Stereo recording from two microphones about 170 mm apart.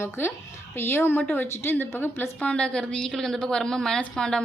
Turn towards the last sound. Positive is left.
turn(degrees=5)  # may be behind; listen again after turning